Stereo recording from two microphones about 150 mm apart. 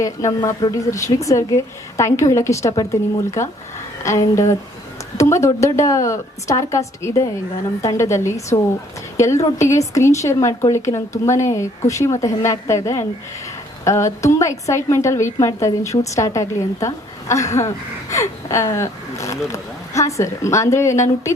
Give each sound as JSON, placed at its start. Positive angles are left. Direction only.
{"t": 0.0, "sound": "speech", "side_deg": 20}